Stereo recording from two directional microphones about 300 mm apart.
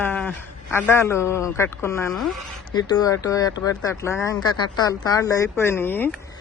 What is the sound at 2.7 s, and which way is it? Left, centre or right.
Speech, centre.